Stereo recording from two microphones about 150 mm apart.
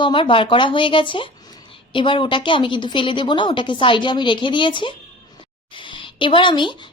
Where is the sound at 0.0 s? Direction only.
35° left (ahead or behind).